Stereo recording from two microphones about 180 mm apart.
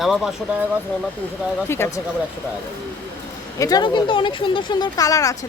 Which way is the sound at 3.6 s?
25° left (ahead or behind).